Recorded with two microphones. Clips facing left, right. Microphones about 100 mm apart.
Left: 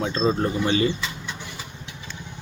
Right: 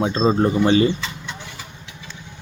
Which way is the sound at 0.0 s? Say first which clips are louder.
Right 5 dB; 30° right (ahead or behind).